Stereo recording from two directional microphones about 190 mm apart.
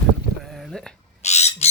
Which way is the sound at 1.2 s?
35° left (ahead or behind).